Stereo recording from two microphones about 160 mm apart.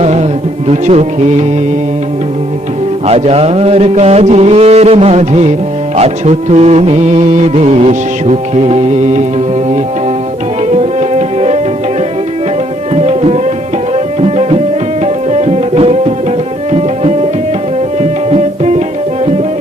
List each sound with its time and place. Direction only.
0.0 s music: 40° right (ahead or behind)
3.1 s music: 40° right (ahead or behind)
10.7 s music: 40° right (ahead or behind)
12.9 s music: 40° right (ahead or behind)
13.9 s tabla: 40° right (ahead or behind)
15.0 s music: 40° right (ahead or behind)
16.7 s tabla: 40° right (ahead or behind)
18.0 s music: 40° right (ahead or behind)